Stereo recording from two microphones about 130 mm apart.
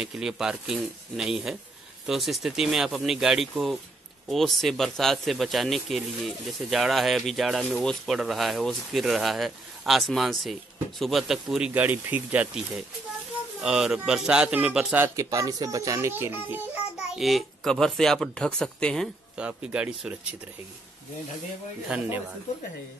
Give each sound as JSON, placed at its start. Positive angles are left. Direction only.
{"t": 0.0, "sound": "speech", "side_deg": -5}
{"t": 15.0, "sound": "a child's voice", "side_deg": -25}
{"t": 17.1, "sound": "speech", "side_deg": 0}
{"t": 19.3, "sound": "speech", "side_deg": -10}
{"t": 21.8, "sound": "speech", "side_deg": -10}